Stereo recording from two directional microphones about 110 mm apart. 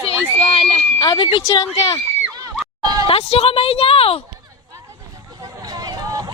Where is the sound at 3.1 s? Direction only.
65° left (ahead or behind).